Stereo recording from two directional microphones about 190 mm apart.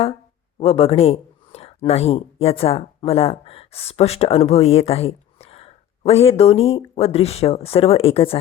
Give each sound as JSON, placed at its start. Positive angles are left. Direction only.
{"t": 0.6, "sound": "speech", "side_deg": 30}